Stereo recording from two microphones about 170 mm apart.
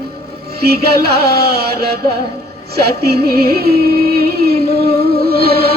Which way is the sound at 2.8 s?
65° right (ahead or behind).